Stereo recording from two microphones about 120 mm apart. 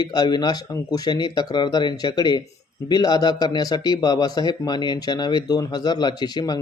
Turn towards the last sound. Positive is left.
turn(degrees=35)  # may be behind; listen again after turning